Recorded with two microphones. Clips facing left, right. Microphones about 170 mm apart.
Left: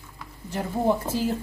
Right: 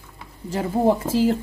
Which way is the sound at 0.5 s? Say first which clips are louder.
Right 4 dB; 90° right.